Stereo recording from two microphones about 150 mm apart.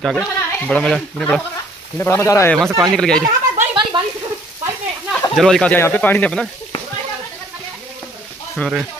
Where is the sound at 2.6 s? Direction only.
20° right (ahead or behind).